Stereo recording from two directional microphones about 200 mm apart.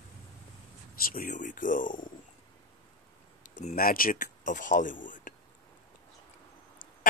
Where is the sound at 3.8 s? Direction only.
45° left (ahead or behind).